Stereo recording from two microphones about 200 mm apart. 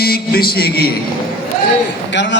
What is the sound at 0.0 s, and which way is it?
Speech, 50° left (ahead or behind).